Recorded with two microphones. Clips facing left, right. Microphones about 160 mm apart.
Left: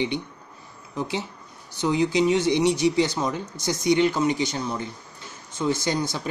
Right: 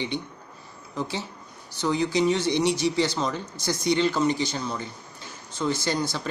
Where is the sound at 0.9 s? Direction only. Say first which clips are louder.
Left 2 dB; 15° left (ahead or behind).